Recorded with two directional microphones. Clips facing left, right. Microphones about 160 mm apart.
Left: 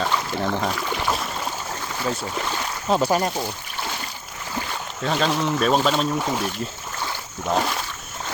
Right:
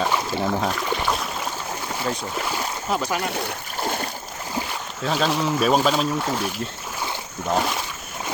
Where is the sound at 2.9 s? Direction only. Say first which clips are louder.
Left 6 dB; 35° left (ahead or behind).